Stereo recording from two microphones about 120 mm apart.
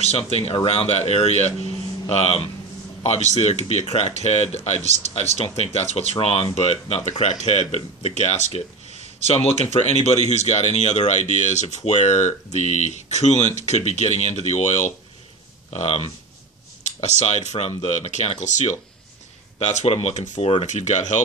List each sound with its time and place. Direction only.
0.0 s a man's voice: 60° left (ahead or behind); by 18.8 s 80° left
19.6 s speech: 65° left (ahead or behind)
20.6 s speech: 80° left